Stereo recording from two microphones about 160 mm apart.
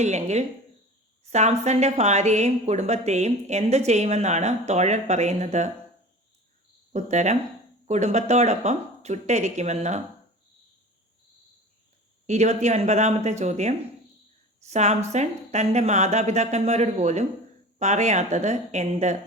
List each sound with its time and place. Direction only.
0.0 s a woman's voice: 45° right (ahead or behind)
6.9 s a woman's voice: 45° right (ahead or behind)
12.2 s a woman's voice: 45° right (ahead or behind)